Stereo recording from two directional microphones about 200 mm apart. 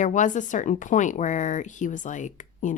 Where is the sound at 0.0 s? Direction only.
40° left (ahead or behind).